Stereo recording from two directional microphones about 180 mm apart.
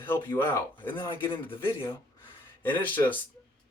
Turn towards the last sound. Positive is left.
turn(degrees=10)  # may be behind; listen again after turning